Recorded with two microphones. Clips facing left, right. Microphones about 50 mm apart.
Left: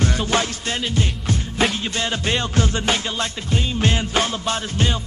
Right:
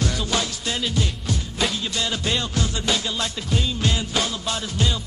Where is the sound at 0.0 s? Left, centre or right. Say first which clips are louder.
Left 4 dB; left.